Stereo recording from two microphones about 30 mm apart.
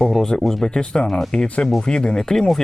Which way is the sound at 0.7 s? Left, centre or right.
Left.